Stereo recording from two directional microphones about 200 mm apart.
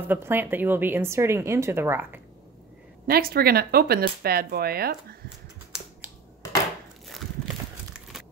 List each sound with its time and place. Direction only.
0.1 s a woman's voice: 10° right (ahead or behind)
3.1 s speech: 50° right (ahead or behind)